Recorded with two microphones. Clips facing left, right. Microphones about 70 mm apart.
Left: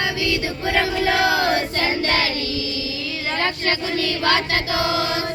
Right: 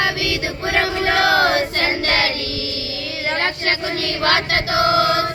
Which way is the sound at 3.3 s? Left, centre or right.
Right.